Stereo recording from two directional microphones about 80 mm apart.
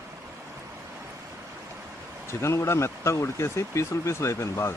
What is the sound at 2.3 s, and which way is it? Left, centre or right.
A man's voice, left.